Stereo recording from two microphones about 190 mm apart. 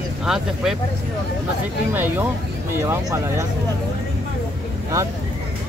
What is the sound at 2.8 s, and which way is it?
Speech, 15° right (ahead or behind).